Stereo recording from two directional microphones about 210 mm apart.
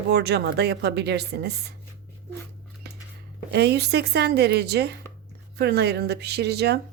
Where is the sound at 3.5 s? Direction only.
50° right (ahead or behind).